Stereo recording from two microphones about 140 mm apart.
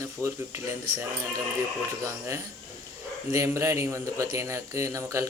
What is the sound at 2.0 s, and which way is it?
Speech, 20° right (ahead or behind).